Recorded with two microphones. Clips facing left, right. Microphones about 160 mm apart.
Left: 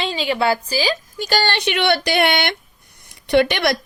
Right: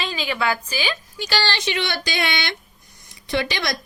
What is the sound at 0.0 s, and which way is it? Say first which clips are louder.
A woman's voice: left 5 dB; 30° left (ahead or behind).